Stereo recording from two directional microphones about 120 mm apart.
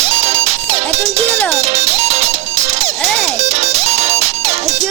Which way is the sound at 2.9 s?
5° left (ahead or behind).